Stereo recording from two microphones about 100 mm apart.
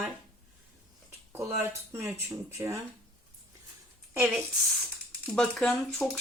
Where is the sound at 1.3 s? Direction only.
25° right (ahead or behind).